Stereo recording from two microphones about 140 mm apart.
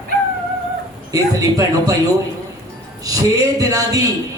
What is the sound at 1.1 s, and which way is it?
Speech, 25° right (ahead or behind).